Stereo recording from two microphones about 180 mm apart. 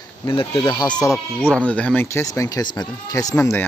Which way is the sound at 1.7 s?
10° left (ahead or behind).